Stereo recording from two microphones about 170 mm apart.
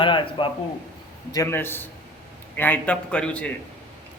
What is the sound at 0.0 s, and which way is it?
Speech, 30° left (ahead or behind).